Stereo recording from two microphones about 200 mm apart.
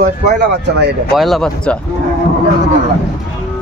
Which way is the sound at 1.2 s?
Centre (ahead or behind).